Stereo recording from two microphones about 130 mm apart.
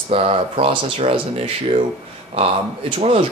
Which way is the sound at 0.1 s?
50° right (ahead or behind).